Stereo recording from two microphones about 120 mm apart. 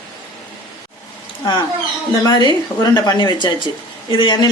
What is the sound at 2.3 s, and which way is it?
Speech, 40° left (ahead or behind).